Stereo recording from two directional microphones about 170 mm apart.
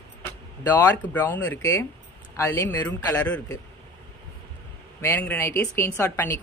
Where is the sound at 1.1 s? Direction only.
10° left (ahead or behind).